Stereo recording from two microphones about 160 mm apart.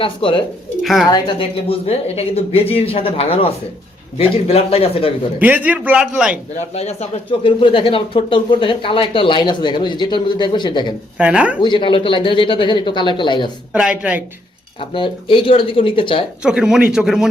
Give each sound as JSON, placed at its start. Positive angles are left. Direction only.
{"t": 0.0, "sound": "speech", "side_deg": 35}
{"t": 0.8, "sound": "speech", "side_deg": 0}
{"t": 1.1, "sound": "speech", "side_deg": 30}
{"t": 5.4, "sound": "a man's voice", "side_deg": -10}
{"t": 6.7, "sound": "speech", "side_deg": 40}
{"t": 11.2, "sound": "a man's voice", "side_deg": -10}
{"t": 11.6, "sound": "speech", "side_deg": 30}
{"t": 13.7, "sound": "a man's voice", "side_deg": -5}
{"t": 14.8, "sound": "speech", "side_deg": 30}
{"t": 16.4, "sound": "a man's voice", "side_deg": -5}